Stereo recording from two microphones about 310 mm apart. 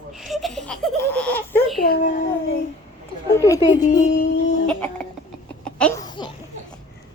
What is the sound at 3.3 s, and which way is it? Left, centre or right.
Speech, centre.